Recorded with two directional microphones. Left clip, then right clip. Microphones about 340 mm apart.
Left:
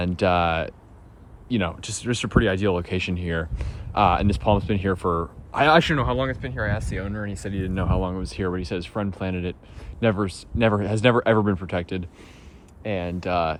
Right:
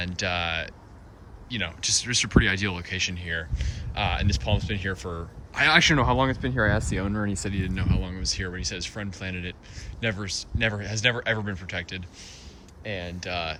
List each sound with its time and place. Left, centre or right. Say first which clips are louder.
0.0 s speech: left 7 dB; centre
5.0 s speech: left 12 dB; left
5.5 s speech: left 2 dB; centre